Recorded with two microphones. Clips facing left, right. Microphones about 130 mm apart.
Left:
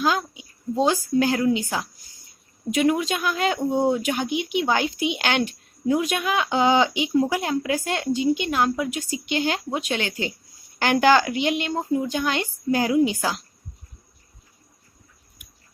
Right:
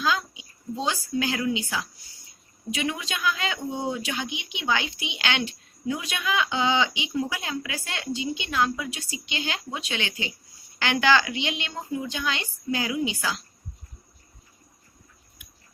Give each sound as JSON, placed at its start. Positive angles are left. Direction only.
{"t": 0.0, "sound": "speech", "side_deg": 50}
{"t": 2.6, "sound": "a woman's voice", "side_deg": 45}